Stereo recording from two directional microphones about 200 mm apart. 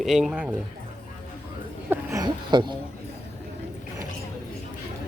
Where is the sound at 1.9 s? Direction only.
15° right (ahead or behind).